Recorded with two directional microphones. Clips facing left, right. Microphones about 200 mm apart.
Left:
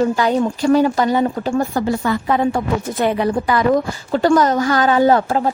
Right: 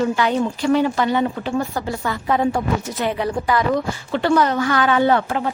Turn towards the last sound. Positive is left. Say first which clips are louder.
# left 4 dB
turn(degrees=40)  # may be behind; listen again after turning